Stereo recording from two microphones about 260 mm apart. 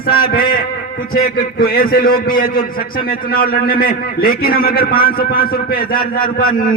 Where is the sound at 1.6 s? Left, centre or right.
Left.